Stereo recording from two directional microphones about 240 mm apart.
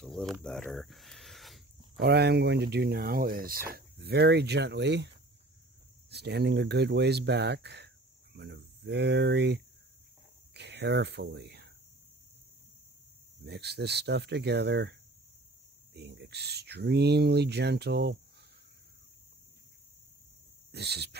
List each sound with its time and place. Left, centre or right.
0.0 s speech: centre
2.0 s speech: right
13.5 s speech: right
20.7 s speech: right